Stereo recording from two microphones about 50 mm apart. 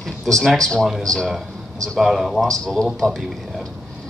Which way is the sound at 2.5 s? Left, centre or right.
Centre.